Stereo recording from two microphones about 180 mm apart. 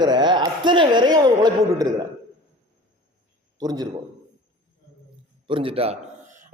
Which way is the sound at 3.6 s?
20° right (ahead or behind).